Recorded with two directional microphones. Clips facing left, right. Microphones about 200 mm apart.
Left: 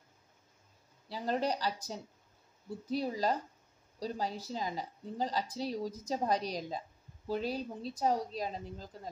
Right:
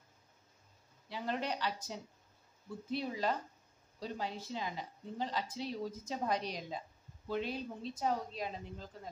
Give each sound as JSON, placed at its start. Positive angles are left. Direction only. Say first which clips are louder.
{"t": 1.0, "sound": "speech", "louder": "left 5 dB", "side_deg": 40}